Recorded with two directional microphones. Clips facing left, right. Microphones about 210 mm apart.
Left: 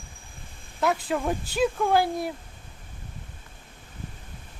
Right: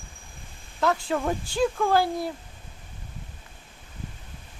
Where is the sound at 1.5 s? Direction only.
15° left (ahead or behind).